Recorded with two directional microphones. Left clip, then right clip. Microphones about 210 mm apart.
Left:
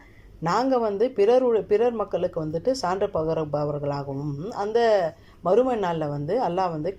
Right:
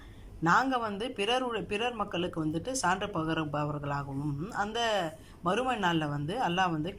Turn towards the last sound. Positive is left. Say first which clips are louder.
# left 5 dB
turn(degrees=20)  # may be behind; listen again after turning